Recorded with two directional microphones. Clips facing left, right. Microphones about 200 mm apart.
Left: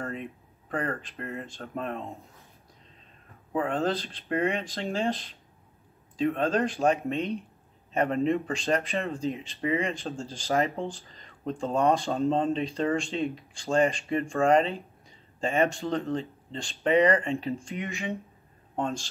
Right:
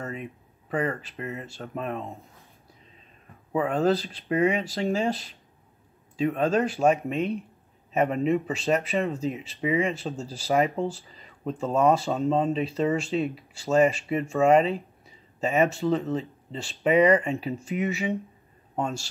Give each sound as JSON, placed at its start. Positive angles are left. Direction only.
{"t": 0.7, "sound": "speech", "side_deg": -10}
{"t": 3.7, "sound": "speech", "side_deg": -10}